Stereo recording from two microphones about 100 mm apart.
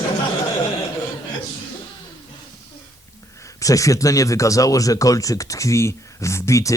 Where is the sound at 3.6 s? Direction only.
35° left (ahead or behind).